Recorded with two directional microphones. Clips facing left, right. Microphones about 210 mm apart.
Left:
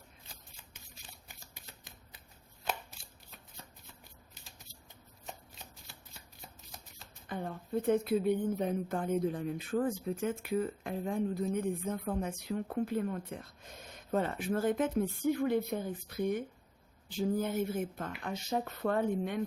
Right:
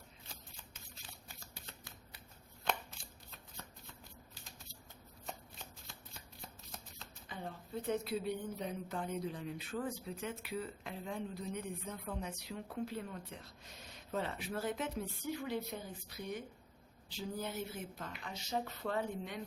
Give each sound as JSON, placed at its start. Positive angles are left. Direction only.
{"t": 7.3, "sound": "speech", "side_deg": 55}